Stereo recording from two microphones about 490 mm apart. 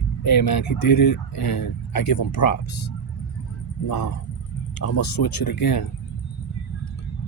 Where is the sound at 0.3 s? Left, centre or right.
Left.